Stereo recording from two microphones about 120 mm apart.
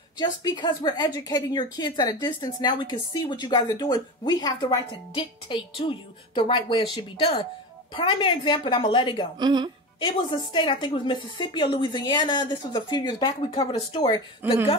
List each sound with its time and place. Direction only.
0.2 s a woman's voice: 35° left (ahead or behind)
5.1 s a woman's voice: 45° left (ahead or behind)
9.4 s speech: 35° right (ahead or behind)
9.9 s a woman's voice: 40° left (ahead or behind)
14.4 s speech: 15° right (ahead or behind)